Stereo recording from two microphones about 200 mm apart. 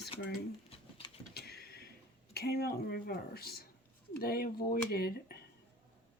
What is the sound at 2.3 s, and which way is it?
Speech, 50° left (ahead or behind).